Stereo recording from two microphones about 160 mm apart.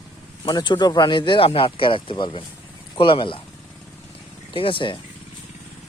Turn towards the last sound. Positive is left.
turn(degrees=30)  # may be behind; listen again after turning